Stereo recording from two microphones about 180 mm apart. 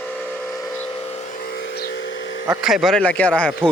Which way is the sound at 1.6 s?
60° left (ahead or behind).